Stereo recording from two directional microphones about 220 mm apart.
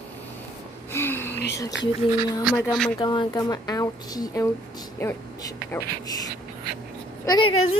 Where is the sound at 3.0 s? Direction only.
20° left (ahead or behind).